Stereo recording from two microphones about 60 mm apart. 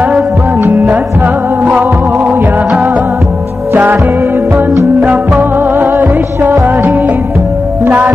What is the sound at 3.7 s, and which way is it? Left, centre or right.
Music, right.